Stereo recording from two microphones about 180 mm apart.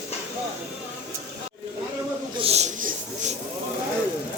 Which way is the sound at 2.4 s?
35° right (ahead or behind).